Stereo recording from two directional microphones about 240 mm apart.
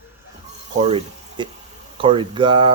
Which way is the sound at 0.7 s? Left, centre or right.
Right.